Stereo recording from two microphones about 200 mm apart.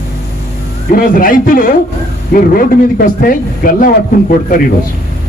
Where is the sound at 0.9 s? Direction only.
45° left (ahead or behind).